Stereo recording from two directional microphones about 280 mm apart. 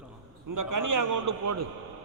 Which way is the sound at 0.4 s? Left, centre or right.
Right.